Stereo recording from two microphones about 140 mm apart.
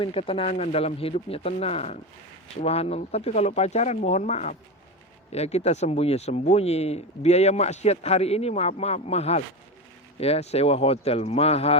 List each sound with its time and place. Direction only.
0.0 s speech: 40° left (ahead or behind)